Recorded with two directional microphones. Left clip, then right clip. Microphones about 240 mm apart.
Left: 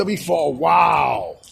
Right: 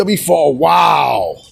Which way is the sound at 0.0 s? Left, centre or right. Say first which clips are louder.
Right 7 dB; right.